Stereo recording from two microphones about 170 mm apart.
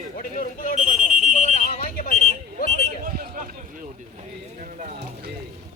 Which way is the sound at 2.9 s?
60° right (ahead or behind).